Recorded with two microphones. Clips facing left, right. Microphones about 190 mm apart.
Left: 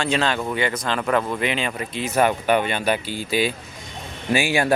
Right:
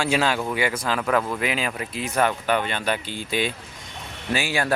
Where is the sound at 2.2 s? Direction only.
15° left (ahead or behind).